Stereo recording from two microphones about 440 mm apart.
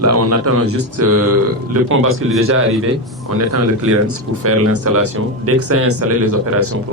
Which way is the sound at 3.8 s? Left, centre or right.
Right.